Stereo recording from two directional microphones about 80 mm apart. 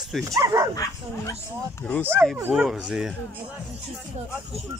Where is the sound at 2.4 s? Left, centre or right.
Right.